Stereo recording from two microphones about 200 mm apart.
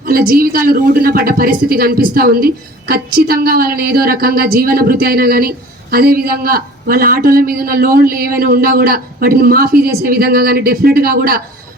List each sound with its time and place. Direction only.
0.0 s a woman's voice: 50° right (ahead or behind)